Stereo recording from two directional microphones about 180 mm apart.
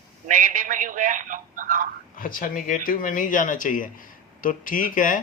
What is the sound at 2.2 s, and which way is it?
Speech, 50° left (ahead or behind).